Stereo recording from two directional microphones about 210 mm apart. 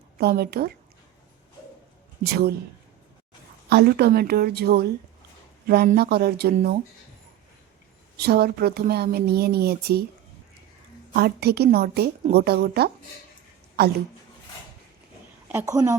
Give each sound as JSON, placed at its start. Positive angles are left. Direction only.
{"t": 0.2, "sound": "a woman's voice", "side_deg": -50}
{"t": 2.2, "sound": "a woman's voice", "side_deg": -50}
{"t": 3.7, "sound": "a woman's voice", "side_deg": -50}
{"t": 8.1, "sound": "a woman's voice", "side_deg": -50}
{"t": 11.1, "sound": "a woman's voice", "side_deg": -50}
{"t": 15.5, "sound": "a woman's voice", "side_deg": -15}